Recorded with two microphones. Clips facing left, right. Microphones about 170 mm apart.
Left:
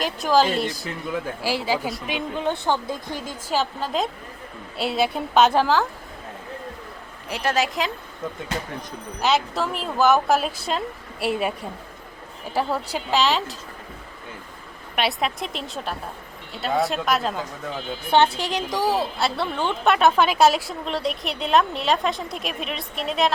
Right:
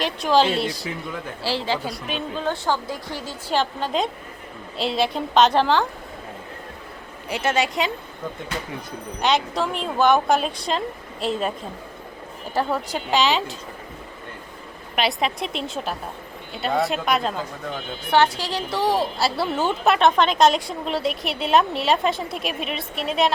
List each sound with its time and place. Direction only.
0.5 s speech: 50° left (ahead or behind)
1.4 s speech: 10° left (ahead or behind)
3.5 s a woman's voice: 5° left (ahead or behind)
7.3 s a woman's voice: centre (ahead or behind)
9.2 s a woman's voice: 5° left (ahead or behind)
12.5 s a woman's voice: 10° left (ahead or behind)
14.9 s a woman's voice: centre (ahead or behind)
18.1 s a woman's voice: 20° left (ahead or behind); by 23.3 s centre (ahead or behind)